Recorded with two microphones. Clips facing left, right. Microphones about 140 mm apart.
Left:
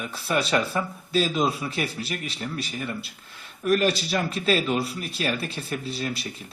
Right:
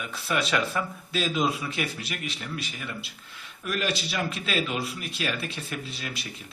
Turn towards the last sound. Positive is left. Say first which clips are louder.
# left 6 dB
turn(degrees=35)  # may be behind; listen again after turning